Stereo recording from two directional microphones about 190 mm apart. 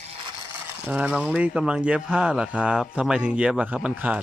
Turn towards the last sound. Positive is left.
turn(degrees=-5)  # may be behind; listen again after turning